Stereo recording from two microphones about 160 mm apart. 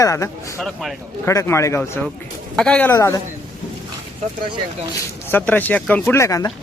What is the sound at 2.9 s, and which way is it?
Speech, 20° left (ahead or behind).